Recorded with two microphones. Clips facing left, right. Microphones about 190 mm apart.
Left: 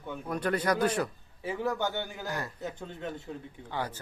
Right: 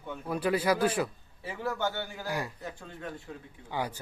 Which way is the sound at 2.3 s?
10° right (ahead or behind).